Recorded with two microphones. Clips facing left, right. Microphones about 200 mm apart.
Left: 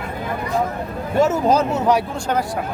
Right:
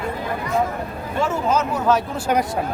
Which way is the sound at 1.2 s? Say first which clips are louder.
Left 4 dB; 40° left (ahead or behind).